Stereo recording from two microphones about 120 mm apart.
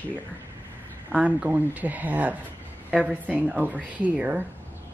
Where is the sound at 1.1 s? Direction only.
10° right (ahead or behind).